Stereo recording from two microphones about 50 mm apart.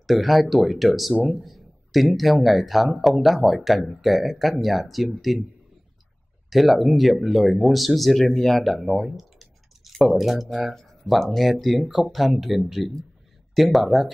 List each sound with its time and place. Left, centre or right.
0.0 s speech: centre
6.5 s speech: centre
8.7 s speech: centre